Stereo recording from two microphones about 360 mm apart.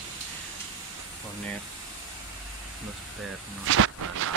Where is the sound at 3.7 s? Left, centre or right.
Right.